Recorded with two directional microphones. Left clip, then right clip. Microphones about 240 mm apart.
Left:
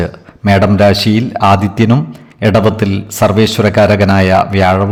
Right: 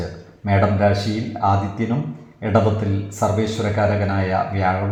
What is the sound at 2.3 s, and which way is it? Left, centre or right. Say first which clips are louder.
A man's voice: left 8 dB; left.